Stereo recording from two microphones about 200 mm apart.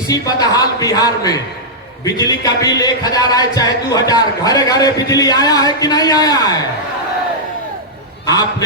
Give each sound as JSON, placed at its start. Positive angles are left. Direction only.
{"t": 0.1, "sound": "a man's voice", "side_deg": 20}
{"t": 8.3, "sound": "a man's voice", "side_deg": 20}